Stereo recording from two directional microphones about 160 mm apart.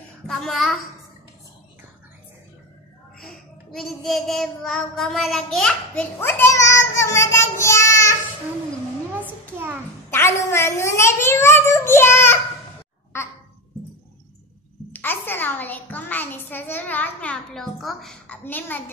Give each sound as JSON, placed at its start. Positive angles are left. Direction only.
{"t": 0.3, "sound": "a child's voice", "side_deg": 0}
{"t": 3.2, "sound": "child singing", "side_deg": 0}
{"t": 10.1, "sound": "a child's voice", "side_deg": 15}
{"t": 14.9, "sound": "a child's voice", "side_deg": 10}